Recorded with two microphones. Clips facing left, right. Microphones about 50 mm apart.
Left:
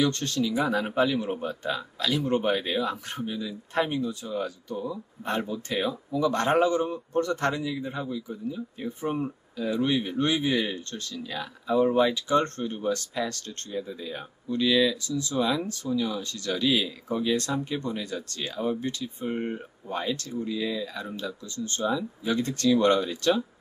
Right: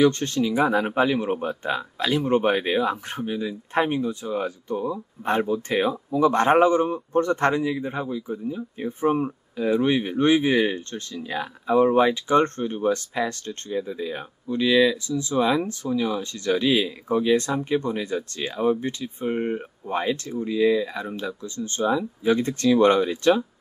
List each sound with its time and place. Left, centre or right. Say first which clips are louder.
0.0 s speech: right 6 dB; right